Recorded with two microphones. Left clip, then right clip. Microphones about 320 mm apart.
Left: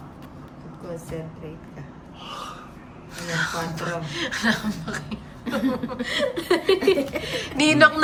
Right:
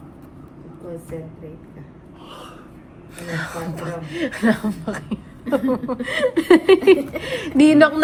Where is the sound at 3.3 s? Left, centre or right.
Centre.